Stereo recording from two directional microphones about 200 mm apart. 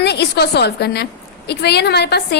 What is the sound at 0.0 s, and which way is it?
A woman's voice, 55° left (ahead or behind).